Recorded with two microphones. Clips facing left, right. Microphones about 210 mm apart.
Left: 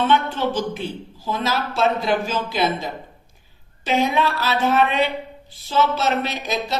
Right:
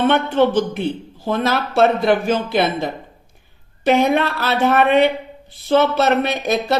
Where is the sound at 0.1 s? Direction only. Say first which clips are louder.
Right 5 dB; 60° right (ahead or behind).